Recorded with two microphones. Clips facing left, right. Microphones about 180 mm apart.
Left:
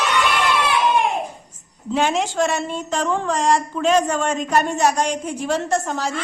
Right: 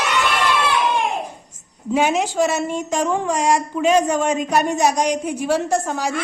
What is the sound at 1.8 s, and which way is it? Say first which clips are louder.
Speech: right 2 dB; 10° right (ahead or behind).